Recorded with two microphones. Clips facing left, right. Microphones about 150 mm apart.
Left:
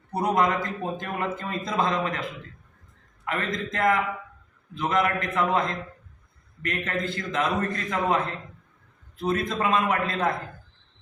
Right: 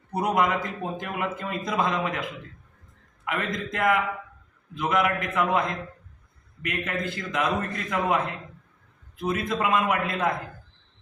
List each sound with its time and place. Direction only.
0.2 s speech: 10° right (ahead or behind)
3.2 s speech: 10° right (ahead or behind)
9.6 s speech: 10° right (ahead or behind)